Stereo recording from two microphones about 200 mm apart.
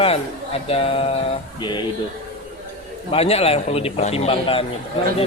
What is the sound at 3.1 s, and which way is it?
A man's voice, 30° left (ahead or behind).